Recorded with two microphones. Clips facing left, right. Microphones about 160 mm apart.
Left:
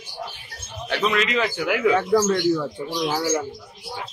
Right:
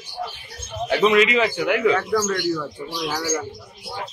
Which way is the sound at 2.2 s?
25° left (ahead or behind).